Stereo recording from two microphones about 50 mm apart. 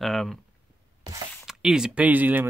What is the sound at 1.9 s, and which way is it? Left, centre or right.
Speech, right.